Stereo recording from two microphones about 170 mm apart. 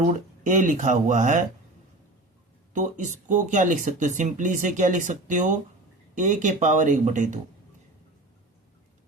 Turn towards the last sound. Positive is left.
turn(degrees=-45)  # may be behind; listen again after turning